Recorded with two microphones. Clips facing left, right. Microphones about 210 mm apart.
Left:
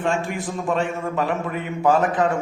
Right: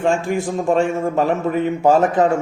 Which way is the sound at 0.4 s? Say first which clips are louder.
Right 6 dB; 45° right (ahead or behind).